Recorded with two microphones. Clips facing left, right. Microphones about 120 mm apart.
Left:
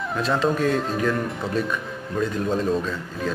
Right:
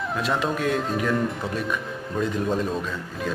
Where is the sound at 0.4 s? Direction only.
5° right (ahead or behind).